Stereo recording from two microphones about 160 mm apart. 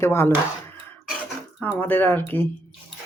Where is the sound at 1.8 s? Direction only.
10° left (ahead or behind).